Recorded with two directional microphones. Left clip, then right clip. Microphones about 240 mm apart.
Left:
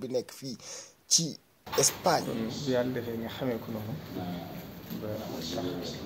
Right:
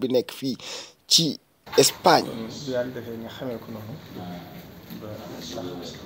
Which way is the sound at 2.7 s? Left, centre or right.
Centre.